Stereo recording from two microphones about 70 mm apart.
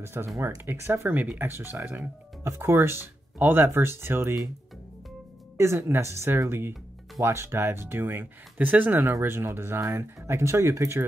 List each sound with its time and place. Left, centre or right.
0.0 s speech: right
1.1 s speech: right
5.6 s speech: right